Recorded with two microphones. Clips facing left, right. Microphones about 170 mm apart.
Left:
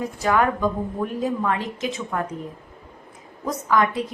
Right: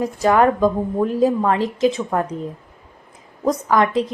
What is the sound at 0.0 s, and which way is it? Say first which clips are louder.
Speech: right 5 dB; 35° right (ahead or behind).